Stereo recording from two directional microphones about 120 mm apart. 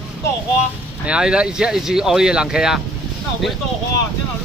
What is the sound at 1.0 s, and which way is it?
Speech, 5° right (ahead or behind).